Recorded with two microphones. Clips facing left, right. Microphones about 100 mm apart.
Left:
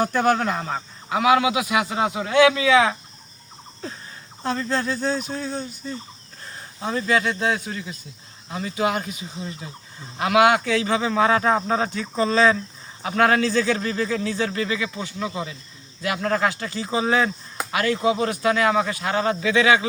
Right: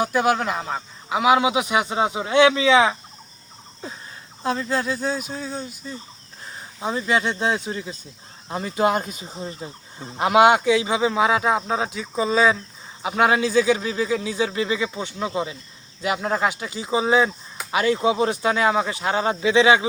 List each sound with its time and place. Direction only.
0.0 s speech: 5° right (ahead or behind)
1.1 s speech: 20° right (ahead or behind)
4.4 s speech: 5° right (ahead or behind)
6.8 s speech: 20° right (ahead or behind)
8.4 s speech: 40° right (ahead or behind); by 19.9 s 20° right (ahead or behind)